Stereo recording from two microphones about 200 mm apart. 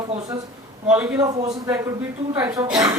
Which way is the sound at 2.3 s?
15° right (ahead or behind).